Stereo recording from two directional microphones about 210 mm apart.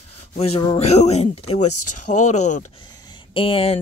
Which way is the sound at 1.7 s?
90° left.